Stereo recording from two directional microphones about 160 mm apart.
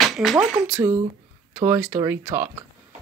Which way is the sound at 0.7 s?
15° right (ahead or behind).